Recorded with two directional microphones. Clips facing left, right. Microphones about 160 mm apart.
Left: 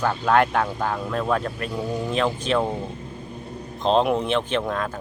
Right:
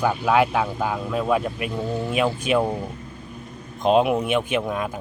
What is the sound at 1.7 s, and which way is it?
Speech, 15° left (ahead or behind).